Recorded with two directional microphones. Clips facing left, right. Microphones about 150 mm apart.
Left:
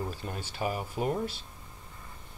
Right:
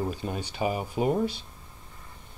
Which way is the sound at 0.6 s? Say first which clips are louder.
Right 4 dB; 20° right (ahead or behind).